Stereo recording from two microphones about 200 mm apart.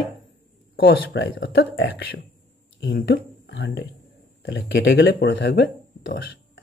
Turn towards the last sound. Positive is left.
turn(degrees=60)  # may be behind; listen again after turning